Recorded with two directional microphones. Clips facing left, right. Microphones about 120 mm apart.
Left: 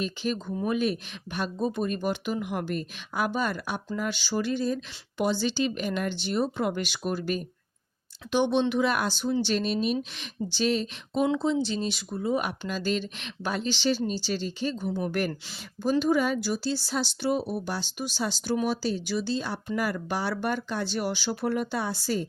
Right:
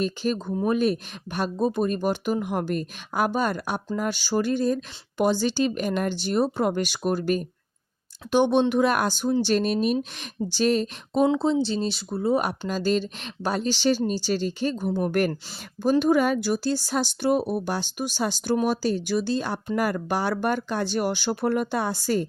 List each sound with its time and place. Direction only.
0.0 s speech: 40° right (ahead or behind)
11.3 s speech: 30° right (ahead or behind); by 22.3 s 50° right (ahead or behind)